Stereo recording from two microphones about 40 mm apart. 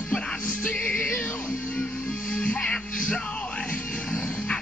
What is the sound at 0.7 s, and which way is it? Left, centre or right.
Music, left.